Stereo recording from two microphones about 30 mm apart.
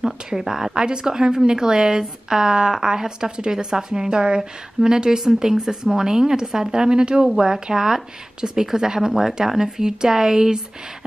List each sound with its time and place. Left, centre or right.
0.0 s a woman's voice: right
0.7 s a woman's voice: right
4.1 s a woman's voice: right